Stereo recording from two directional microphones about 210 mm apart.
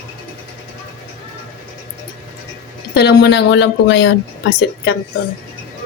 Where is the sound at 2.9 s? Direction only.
50° left (ahead or behind).